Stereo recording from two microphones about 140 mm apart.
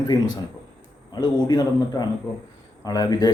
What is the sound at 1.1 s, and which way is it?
Speech, 30° left (ahead or behind).